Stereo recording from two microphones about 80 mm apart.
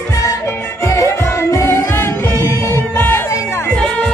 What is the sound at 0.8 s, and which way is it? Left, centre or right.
Music, left.